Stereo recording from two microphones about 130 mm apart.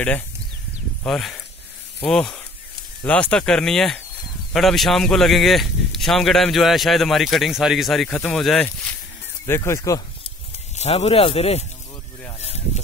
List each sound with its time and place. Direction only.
1.0 s speech: 5° left (ahead or behind)
9.5 s speech: 25° left (ahead or behind)
10.8 s speech: 55° left (ahead or behind)
12.4 s a sound: 55° left (ahead or behind)